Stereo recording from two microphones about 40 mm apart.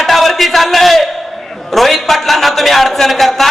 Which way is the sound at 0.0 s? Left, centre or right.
Centre.